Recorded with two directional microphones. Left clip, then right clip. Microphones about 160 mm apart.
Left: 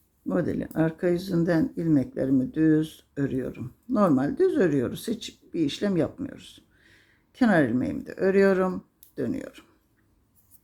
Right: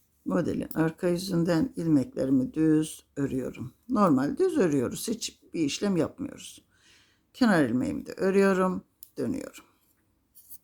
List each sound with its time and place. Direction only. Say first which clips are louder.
0.3 s speech: left 1 dB; 15° right (ahead or behind)